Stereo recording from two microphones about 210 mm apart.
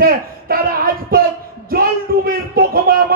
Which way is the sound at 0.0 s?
45° right (ahead or behind).